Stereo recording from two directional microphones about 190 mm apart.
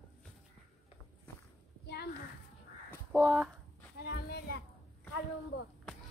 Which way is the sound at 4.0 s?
55° left (ahead or behind).